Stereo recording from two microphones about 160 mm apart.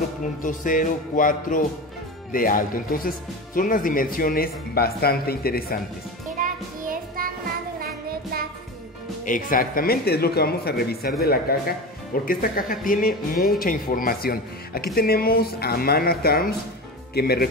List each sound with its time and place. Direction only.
0.4 s speech: 55° left (ahead or behind)
6.4 s music: 60° right (ahead or behind)
7.8 s child singing: 70° right (ahead or behind)
9.2 s speech: 60° left (ahead or behind); by 17.5 s 75° left (ahead or behind)